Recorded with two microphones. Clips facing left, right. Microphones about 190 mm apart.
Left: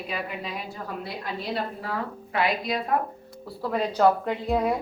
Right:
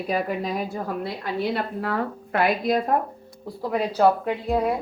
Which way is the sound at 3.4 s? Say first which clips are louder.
Right 2 dB; 15° right (ahead or behind).